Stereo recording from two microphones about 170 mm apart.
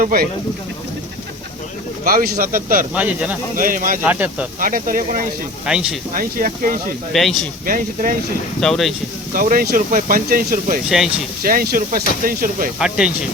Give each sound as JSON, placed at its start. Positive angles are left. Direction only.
{"t": 0.0, "sound": "speech", "side_deg": -60}
{"t": 2.0, "sound": "speech", "side_deg": -60}
{"t": 2.9, "sound": "speech", "side_deg": -5}
{"t": 3.6, "sound": "speech", "side_deg": -55}
{"t": 4.0, "sound": "speech", "side_deg": -10}
{"t": 4.6, "sound": "speech", "side_deg": -55}
{"t": 5.6, "sound": "speech", "side_deg": -5}
{"t": 6.1, "sound": "speech", "side_deg": -50}
{"t": 7.1, "sound": "speech", "side_deg": 0}
{"t": 7.6, "sound": "speech", "side_deg": -55}
{"t": 8.6, "sound": "speech", "side_deg": 0}
{"t": 9.3, "sound": "speech", "side_deg": -55}
{"t": 10.8, "sound": "speech", "side_deg": 0}
{"t": 11.4, "sound": "speech", "side_deg": -60}